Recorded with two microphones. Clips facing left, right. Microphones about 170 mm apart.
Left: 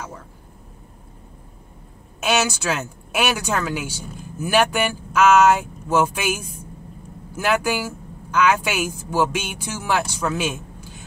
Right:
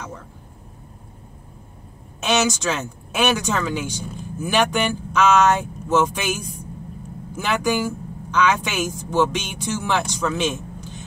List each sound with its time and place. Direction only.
2.2 s speech: 10° left (ahead or behind)